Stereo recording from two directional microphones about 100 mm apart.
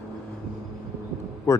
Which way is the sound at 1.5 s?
25° left (ahead or behind).